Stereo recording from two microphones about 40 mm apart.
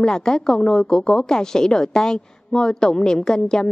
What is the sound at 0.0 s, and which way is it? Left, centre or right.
Speech, centre.